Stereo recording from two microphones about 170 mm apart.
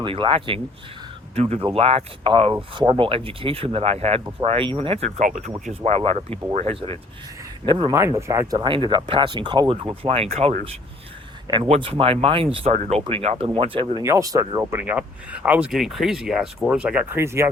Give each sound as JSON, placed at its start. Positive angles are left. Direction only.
{"t": 0.0, "sound": "speech", "side_deg": -30}
{"t": 1.6, "sound": "speech", "side_deg": -35}
{"t": 7.9, "sound": "speech", "side_deg": -15}
{"t": 11.4, "sound": "speech", "side_deg": -25}
{"t": 14.0, "sound": "speech", "side_deg": -20}